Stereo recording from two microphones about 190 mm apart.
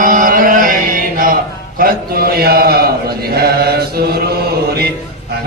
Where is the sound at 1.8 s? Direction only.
50° right (ahead or behind).